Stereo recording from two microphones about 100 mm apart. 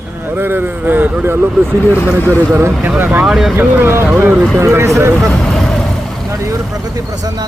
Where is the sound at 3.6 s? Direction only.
20° right (ahead or behind).